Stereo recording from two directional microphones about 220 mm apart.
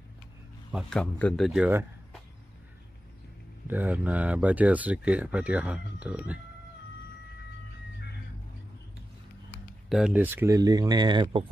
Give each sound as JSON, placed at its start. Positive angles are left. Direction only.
{"t": 0.7, "sound": "speech", "side_deg": 0}
{"t": 3.6, "sound": "speech", "side_deg": -10}
{"t": 9.8, "sound": "speech", "side_deg": -5}